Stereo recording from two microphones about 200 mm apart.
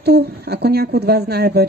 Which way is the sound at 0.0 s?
55° right (ahead or behind).